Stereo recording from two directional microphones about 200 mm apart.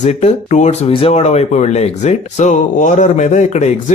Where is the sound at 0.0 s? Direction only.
35° left (ahead or behind).